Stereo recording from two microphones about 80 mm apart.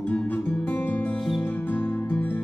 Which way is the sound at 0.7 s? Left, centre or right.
Left.